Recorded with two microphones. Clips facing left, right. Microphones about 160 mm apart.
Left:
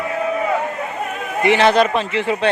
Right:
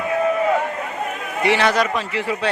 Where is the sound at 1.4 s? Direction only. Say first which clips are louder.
Left 4 dB; 20° left (ahead or behind).